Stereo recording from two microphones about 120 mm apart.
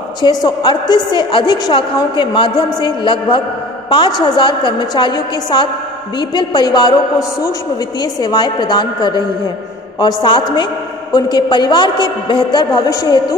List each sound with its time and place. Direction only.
0.2 s a woman's voice: 35° left (ahead or behind)